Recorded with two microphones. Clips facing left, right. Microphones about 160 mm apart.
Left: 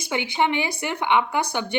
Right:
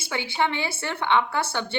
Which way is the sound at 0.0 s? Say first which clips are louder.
Left 3 dB; 20° left (ahead or behind).